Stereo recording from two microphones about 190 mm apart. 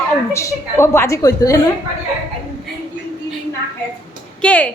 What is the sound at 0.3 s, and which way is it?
A woman's voice, 15° left (ahead or behind).